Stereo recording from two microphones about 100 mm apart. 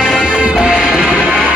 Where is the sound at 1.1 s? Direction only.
10° left (ahead or behind).